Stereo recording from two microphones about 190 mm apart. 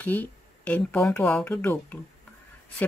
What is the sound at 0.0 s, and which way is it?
Speech, 10° left (ahead or behind).